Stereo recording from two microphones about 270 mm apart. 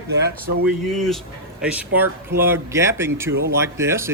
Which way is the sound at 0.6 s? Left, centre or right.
Centre.